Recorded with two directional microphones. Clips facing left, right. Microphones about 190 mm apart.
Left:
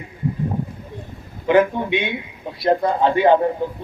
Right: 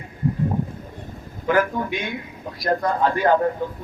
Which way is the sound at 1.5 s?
25° left (ahead or behind).